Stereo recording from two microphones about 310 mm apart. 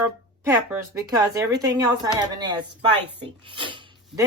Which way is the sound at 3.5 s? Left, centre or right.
Centre.